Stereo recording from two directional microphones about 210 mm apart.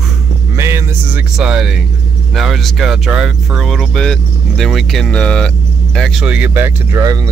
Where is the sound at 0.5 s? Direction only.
15° right (ahead or behind).